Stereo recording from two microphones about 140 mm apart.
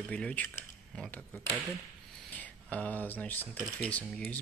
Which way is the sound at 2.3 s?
10° left (ahead or behind).